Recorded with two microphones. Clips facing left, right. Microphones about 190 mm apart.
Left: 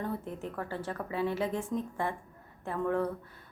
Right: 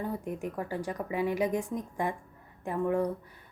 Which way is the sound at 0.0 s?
15° right (ahead or behind).